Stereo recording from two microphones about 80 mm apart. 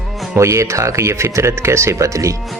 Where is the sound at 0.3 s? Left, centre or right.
Right.